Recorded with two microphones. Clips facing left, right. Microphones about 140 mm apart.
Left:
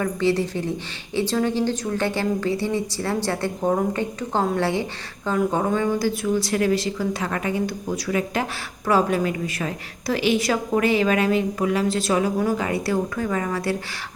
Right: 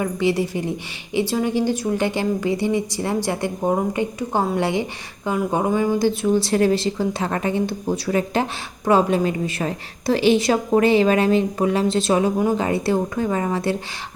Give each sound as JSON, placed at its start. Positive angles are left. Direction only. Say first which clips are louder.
{"t": 0.0, "sound": "a woman's voice", "louder": "right 1 dB", "side_deg": -15}